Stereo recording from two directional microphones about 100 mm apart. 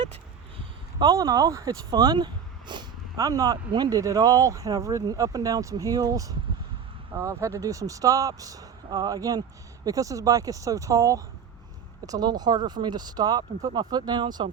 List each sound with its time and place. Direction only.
0.9 s speech: 40° right (ahead or behind)
3.2 s speech: 35° right (ahead or behind)